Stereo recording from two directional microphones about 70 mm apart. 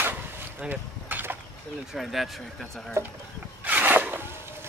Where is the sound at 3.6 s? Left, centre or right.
Right.